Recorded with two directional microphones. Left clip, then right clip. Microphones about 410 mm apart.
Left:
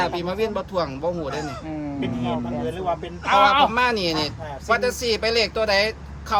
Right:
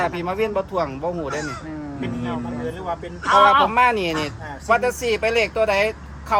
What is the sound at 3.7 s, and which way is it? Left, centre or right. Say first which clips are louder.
Speech: right 3 dB; centre.